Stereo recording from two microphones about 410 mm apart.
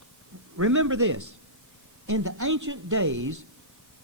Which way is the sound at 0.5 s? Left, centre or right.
Right.